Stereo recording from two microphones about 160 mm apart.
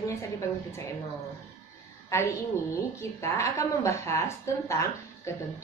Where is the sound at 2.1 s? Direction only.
15° left (ahead or behind).